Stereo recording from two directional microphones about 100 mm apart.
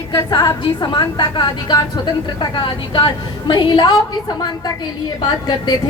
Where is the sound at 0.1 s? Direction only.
40° left (ahead or behind).